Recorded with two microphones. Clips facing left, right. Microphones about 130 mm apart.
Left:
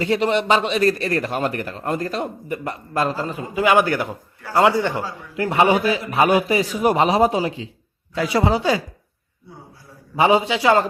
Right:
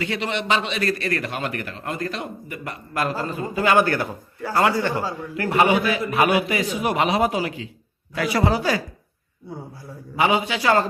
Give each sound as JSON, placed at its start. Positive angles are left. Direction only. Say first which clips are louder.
{"t": 0.0, "sound": "a man's voice", "louder": "left 7 dB", "side_deg": 40}
{"t": 5.6, "sound": "a man's voice", "louder": "left 2 dB", "side_deg": 30}
{"t": 10.2, "sound": "a man's voice", "louder": "left 4 dB", "side_deg": 30}
{"t": 10.5, "sound": "a man's voice", "louder": "left 3 dB", "side_deg": 20}